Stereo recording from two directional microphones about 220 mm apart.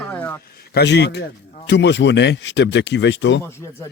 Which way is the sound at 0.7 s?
50° left (ahead or behind).